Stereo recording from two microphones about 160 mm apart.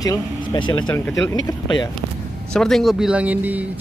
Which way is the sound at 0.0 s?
25° left (ahead or behind).